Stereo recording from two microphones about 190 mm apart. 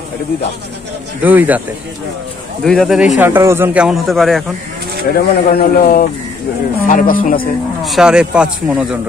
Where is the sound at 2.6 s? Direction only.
Centre (ahead or behind).